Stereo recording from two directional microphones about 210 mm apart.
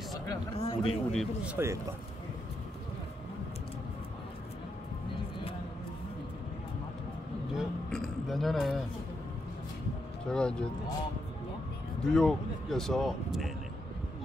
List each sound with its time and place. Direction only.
0.3 s speech: 25° left (ahead or behind)
1.1 s speech: centre (ahead or behind)
7.5 s a sound: centre (ahead or behind)
10.3 s speech: 5° left (ahead or behind)
12.0 s speech: 5° left (ahead or behind)